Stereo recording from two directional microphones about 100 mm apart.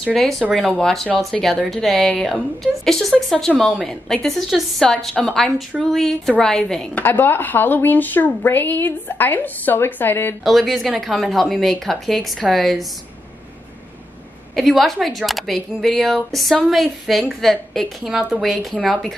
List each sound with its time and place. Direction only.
0.0 s a woman's voice: 5° left (ahead or behind)
7.0 s speech: 20° left (ahead or behind)
10.4 s a woman's voice: centre (ahead or behind)
14.5 s a woman's voice: centre (ahead or behind)